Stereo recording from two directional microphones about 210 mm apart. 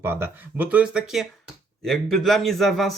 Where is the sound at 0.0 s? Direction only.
10° right (ahead or behind).